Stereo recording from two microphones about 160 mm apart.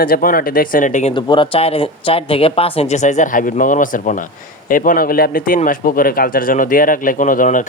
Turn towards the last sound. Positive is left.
turn(degrees=55)  # may be behind; listen again after turning